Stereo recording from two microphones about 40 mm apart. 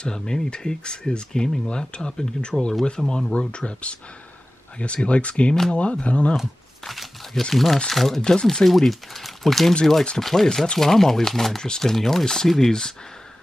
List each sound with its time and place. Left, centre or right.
0.0 s speech: centre
3.3 s speech: left
6.8 s a sound: centre
7.5 s speech: centre
8.2 s speech: centre